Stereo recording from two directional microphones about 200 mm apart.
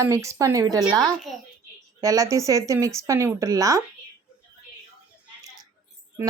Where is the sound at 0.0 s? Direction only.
15° right (ahead or behind).